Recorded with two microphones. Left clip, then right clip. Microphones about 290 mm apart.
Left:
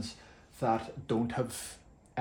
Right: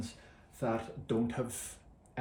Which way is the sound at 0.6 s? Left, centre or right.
Left.